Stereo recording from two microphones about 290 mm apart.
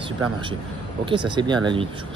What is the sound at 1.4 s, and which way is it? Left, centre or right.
Speech, centre.